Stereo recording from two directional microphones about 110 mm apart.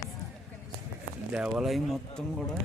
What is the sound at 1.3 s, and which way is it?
Speech, 5° right (ahead or behind).